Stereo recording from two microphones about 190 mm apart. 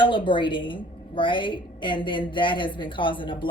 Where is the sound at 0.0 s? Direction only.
25° left (ahead or behind).